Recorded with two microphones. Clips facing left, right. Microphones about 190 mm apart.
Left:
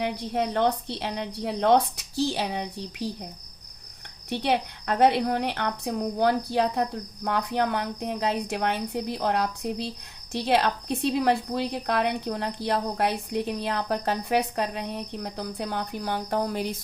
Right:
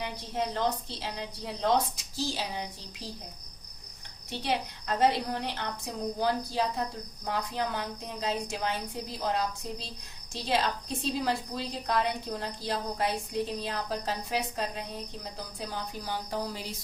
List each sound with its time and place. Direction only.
0.0 s a woman's voice: 60° left (ahead or behind)
4.3 s a woman's voice: 60° left (ahead or behind)